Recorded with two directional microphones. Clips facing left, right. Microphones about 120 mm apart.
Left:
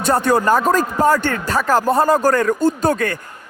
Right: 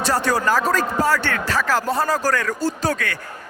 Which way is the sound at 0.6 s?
45° left (ahead or behind).